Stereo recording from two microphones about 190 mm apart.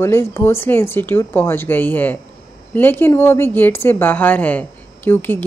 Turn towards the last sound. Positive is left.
turn(degrees=10)  # may be behind; listen again after turning